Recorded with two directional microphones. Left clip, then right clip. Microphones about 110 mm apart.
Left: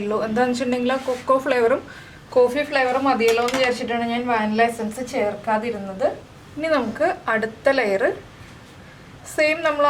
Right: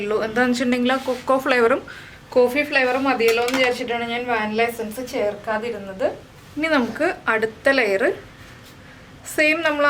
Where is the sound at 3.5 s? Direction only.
5° right (ahead or behind).